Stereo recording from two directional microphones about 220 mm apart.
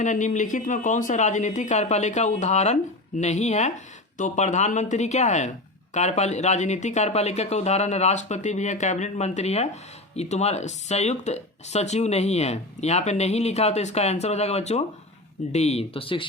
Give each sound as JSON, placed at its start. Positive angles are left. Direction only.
{"t": 0.0, "sound": "speech", "side_deg": 35}